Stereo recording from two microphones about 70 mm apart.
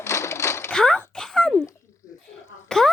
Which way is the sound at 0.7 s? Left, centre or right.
Centre.